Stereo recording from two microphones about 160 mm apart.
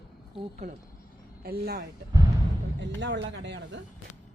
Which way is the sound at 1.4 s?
75° right (ahead or behind).